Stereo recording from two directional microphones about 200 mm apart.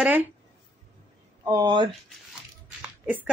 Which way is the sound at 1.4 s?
15° right (ahead or behind).